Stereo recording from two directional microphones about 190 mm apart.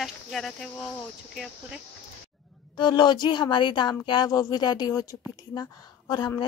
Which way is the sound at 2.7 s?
25° left (ahead or behind).